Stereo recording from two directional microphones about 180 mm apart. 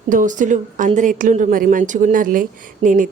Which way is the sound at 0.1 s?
45° right (ahead or behind).